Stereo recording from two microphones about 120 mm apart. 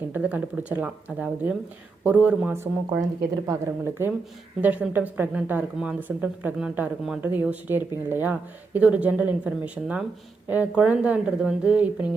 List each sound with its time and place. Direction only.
0.1 s speech: 15° right (ahead or behind)
3.0 s speech: 30° right (ahead or behind)
4.6 s speech: 15° right (ahead or behind)